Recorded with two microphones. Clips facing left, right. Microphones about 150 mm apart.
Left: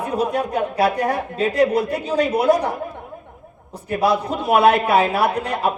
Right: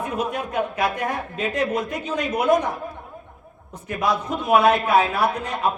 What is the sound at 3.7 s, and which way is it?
Speech, 35° left (ahead or behind).